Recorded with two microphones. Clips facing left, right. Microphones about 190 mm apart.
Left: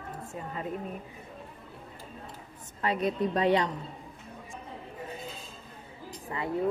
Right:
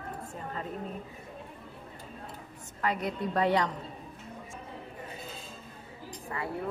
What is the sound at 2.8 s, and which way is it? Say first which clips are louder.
Speech: left 3 dB; 20° left (ahead or behind).